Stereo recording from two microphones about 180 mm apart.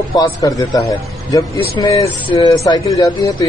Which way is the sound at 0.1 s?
20° left (ahead or behind).